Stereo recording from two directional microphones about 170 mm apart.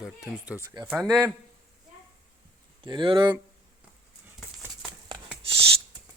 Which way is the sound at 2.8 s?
25° right (ahead or behind).